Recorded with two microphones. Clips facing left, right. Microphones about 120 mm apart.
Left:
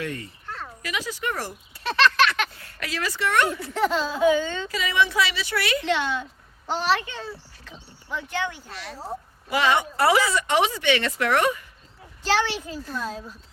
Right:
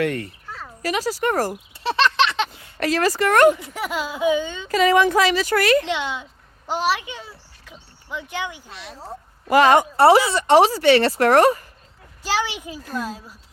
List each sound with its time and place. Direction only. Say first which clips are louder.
0.0 s speech: right 9 dB; 65° right (ahead or behind)
0.4 s a sound: even; centre (ahead or behind)
0.8 s speech: right 9 dB; 40° right (ahead or behind)
1.8 s a sound: right 1 dB; 20° right (ahead or behind)
2.7 s speech: right 10 dB; 45° right (ahead or behind)
3.6 s speech: left 3 dB; 10° right (ahead or behind)
4.7 s speech: right 10 dB; 45° right (ahead or behind)
5.8 s speech: left 1 dB; 15° right (ahead or behind)
8.7 s speech: left 1 dB; centre (ahead or behind)
9.5 s speech: right 8 dB; 45° right (ahead or behind)
10.0 s speech: right 5 dB; 30° right (ahead or behind)
12.2 s speech: left 1 dB; 10° right (ahead or behind)